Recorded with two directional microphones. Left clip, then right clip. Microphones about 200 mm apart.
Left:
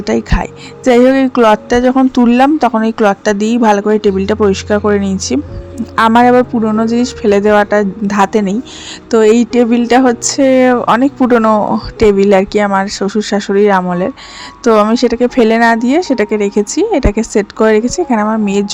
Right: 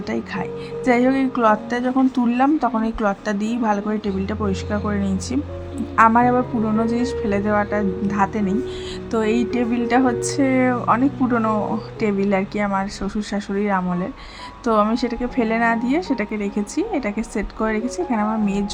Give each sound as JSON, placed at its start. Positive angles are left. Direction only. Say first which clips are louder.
{"t": 0.0, "sound": "a woman's voice", "louder": "left 11 dB", "side_deg": 35}